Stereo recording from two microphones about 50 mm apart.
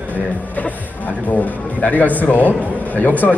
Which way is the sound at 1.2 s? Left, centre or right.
Left.